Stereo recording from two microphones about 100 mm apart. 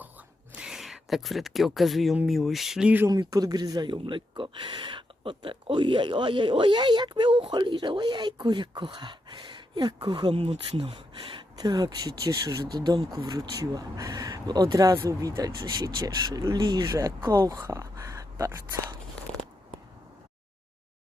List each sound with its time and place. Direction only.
0.5 s speech: 5° right (ahead or behind)
3.1 s speech: 40° right (ahead or behind); by 10.8 s 80° right
10.8 s speech: 55° right (ahead or behind)
11.5 s speech: 45° right (ahead or behind); by 18.8 s 25° right (ahead or behind)